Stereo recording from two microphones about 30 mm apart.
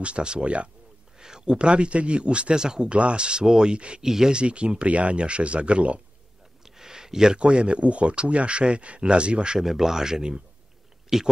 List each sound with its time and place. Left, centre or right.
0.0 s speech: right
1.1 s speech: right
2.5 s speech: right
2.9 s speech: right
4.0 s speech: centre
4.3 s speech: right
6.6 s a sound: centre
7.3 s speech: right
9.6 s speech: centre